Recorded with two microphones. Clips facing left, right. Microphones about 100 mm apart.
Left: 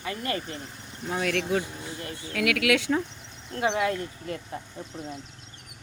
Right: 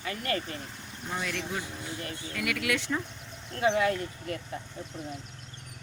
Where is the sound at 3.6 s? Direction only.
25° left (ahead or behind).